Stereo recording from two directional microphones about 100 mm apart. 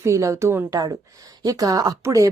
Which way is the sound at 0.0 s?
30° right (ahead or behind).